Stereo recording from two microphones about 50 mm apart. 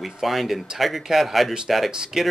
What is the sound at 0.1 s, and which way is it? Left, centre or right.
Speech, centre.